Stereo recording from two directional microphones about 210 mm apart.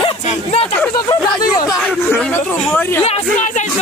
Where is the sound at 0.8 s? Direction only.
15° left (ahead or behind).